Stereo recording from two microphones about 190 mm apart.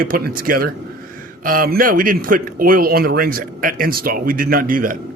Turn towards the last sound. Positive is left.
turn(degrees=-45)  # may be behind; listen again after turning